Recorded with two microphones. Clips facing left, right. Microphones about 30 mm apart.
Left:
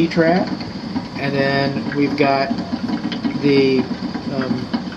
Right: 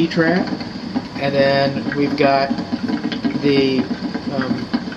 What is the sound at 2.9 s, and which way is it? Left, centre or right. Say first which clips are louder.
Engine: right 2 dB; centre.